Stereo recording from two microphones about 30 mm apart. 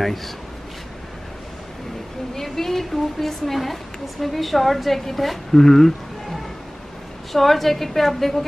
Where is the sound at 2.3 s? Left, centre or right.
Centre.